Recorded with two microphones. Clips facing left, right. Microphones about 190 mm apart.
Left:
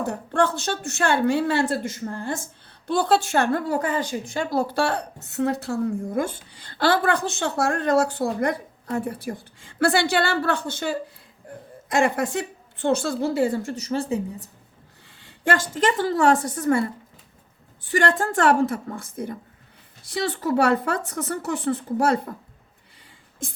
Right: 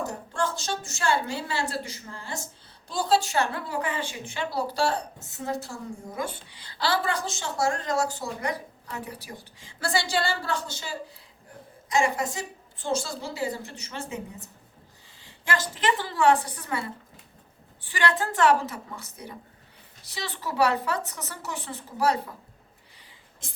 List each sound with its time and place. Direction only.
0.0 s a woman's voice: 60° left (ahead or behind)
6.5 s a woman's voice: 50° left (ahead or behind); by 14.5 s 35° left (ahead or behind)
15.2 s speech: 50° left (ahead or behind)
17.9 s speech: 50° left (ahead or behind)